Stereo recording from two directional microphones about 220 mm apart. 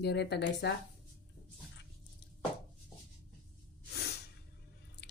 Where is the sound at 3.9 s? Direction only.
45° left (ahead or behind).